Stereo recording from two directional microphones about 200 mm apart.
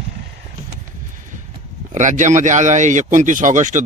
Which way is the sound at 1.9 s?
40° right (ahead or behind).